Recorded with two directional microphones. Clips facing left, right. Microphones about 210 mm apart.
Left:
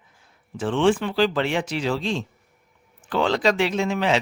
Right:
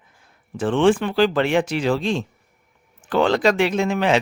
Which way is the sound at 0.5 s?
55° right (ahead or behind).